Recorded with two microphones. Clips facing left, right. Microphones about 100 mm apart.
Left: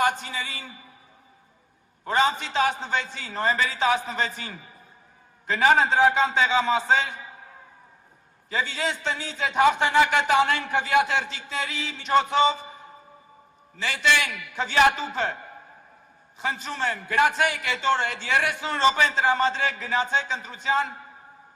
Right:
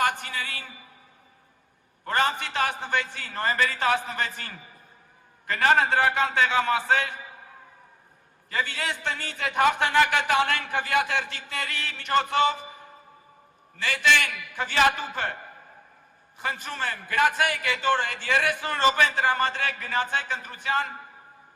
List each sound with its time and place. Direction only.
0.0 s a sound: 55° right (ahead or behind)
2.0 s a man's voice: 55° right (ahead or behind)
8.4 s a man's voice: 55° right (ahead or behind)
16.4 s a man's voice: 55° right (ahead or behind)